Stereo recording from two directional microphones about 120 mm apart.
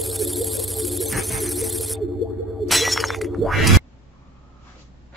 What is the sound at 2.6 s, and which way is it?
Shatter, centre (ahead or behind).